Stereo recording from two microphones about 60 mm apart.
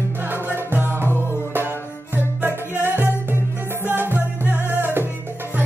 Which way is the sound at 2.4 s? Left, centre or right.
Right.